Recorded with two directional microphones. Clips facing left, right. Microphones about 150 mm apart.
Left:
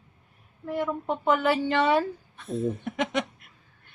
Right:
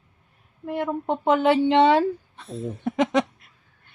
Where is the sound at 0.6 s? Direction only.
25° right (ahead or behind).